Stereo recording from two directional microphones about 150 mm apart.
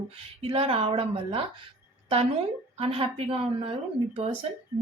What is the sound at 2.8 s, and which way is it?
Speech, 40° right (ahead or behind).